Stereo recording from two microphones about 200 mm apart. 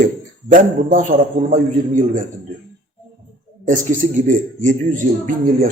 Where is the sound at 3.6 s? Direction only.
40° right (ahead or behind).